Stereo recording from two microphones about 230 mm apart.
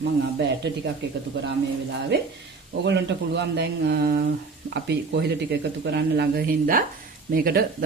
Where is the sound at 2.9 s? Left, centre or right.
Right.